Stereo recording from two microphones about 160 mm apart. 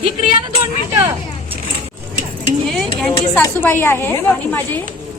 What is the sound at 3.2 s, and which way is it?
A woman's voice, 15° left (ahead or behind).